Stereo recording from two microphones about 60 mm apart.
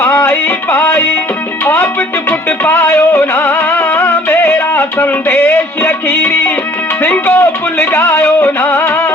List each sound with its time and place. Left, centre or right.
0.0 s music: left
4.7 s a sound: left
5.8 s speech: left
7.9 s music: left
8.2 s music: left